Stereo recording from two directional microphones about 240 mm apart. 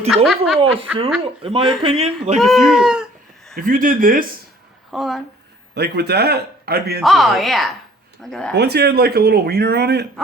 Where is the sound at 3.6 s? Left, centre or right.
Right.